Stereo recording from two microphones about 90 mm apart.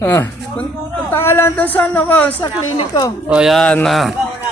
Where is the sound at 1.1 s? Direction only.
30° left (ahead or behind).